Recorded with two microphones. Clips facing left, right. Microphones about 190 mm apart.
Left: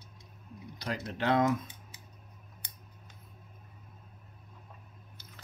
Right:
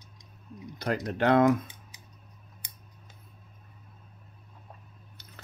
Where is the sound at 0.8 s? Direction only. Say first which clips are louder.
Right 7 dB; 50° right (ahead or behind).